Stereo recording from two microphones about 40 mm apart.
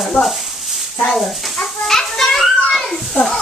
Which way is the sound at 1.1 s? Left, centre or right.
Centre.